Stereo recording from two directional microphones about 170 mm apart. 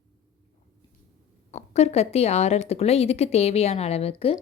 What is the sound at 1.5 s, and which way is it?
Speech, 40° left (ahead or behind).